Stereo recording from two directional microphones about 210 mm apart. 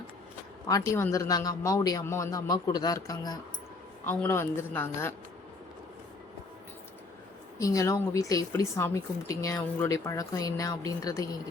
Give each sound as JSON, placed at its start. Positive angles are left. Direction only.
{"t": 0.7, "sound": "a woman's voice", "side_deg": 15}
{"t": 7.6, "sound": "a woman's voice", "side_deg": 15}